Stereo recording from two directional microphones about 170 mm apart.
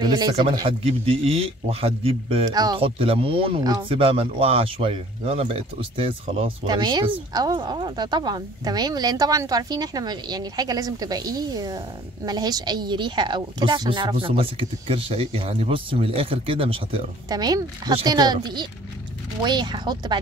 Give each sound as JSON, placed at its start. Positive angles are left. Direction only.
{"t": 0.0, "sound": "a man's voice", "side_deg": -25}